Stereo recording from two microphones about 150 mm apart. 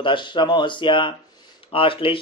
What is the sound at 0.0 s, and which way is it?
A man's voice, 35° left (ahead or behind).